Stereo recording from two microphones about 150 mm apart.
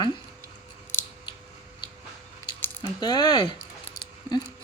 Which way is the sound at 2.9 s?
25° left (ahead or behind).